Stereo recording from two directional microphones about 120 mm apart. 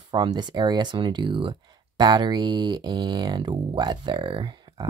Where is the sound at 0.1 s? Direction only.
35° right (ahead or behind).